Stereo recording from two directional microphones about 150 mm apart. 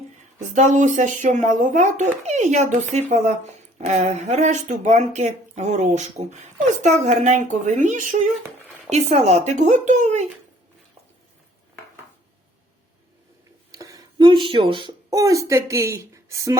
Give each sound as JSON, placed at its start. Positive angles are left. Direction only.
{"t": 0.3, "sound": "speech", "side_deg": -55}
{"t": 13.7, "sound": "a sound", "side_deg": -20}
{"t": 14.8, "sound": "speech", "side_deg": -25}